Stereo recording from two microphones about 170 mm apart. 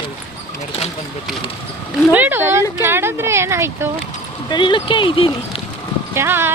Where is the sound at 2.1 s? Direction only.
10° right (ahead or behind).